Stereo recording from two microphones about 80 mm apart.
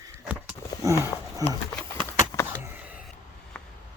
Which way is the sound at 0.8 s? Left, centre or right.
Right.